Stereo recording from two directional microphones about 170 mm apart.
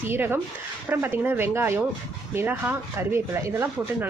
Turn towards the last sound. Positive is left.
turn(degrees=-10)  # may be behind; listen again after turning